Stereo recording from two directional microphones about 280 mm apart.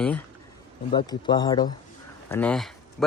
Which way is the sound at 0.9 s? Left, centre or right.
Centre.